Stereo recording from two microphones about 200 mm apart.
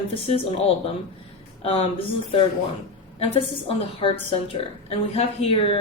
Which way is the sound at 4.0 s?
25° left (ahead or behind).